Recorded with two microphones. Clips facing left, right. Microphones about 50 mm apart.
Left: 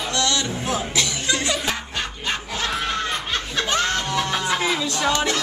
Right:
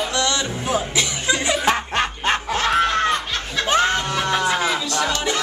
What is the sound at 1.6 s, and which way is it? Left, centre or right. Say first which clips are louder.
Snicker: right 7 dB; right.